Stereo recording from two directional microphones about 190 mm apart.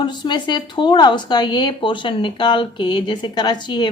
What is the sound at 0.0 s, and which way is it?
Speech, 25° left (ahead or behind).